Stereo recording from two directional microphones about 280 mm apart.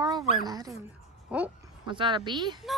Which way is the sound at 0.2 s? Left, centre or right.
Centre.